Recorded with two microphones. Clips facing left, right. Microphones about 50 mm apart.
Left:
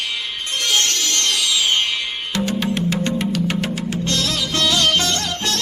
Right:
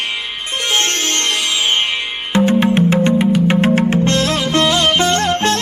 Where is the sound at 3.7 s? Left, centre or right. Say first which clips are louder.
Right 9 dB; right.